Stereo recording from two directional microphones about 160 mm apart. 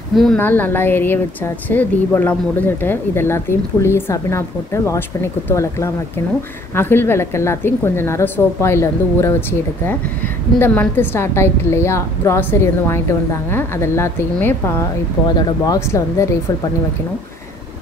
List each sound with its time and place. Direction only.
0.1 s speech: centre (ahead or behind)
0.4 s a woman's voice: 10° left (ahead or behind)